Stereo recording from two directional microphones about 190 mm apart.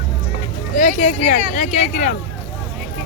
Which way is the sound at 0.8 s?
45° left (ahead or behind).